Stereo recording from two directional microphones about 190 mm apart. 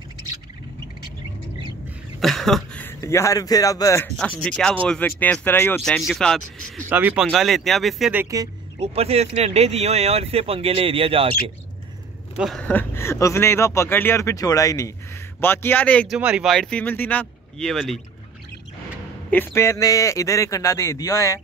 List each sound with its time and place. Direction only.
2.1 s speech: centre (ahead or behind)
6.9 s speech: 10° right (ahead or behind)
8.7 s speech: 30° right (ahead or behind)
12.4 s speech: centre (ahead or behind)
16.2 s speech: 5° right (ahead or behind)
19.3 s speech: 10° left (ahead or behind)